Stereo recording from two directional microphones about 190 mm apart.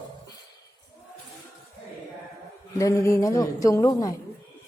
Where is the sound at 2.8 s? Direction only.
15° left (ahead or behind).